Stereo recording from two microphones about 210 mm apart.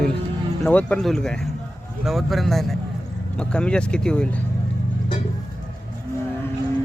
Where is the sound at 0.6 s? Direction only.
5° left (ahead or behind).